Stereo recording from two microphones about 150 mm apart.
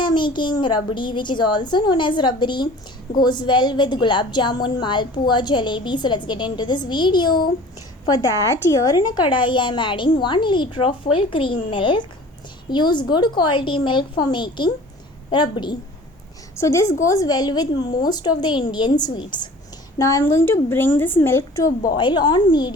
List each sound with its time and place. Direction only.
0.0 s a woman's voice: 30° left (ahead or behind)
16.6 s a woman's voice: 20° left (ahead or behind)
20.0 s a woman's voice: 20° left (ahead or behind)
21.9 s a woman's voice: 30° left (ahead or behind)